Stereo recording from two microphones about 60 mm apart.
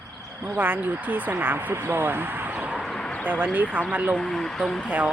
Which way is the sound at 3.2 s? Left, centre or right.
Right.